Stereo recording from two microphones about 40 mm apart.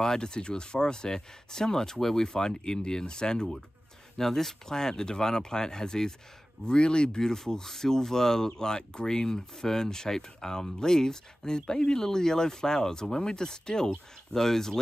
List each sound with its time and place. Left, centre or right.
0.0 s speech: centre